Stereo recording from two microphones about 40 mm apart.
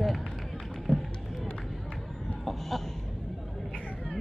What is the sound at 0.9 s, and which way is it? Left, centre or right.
Run, left.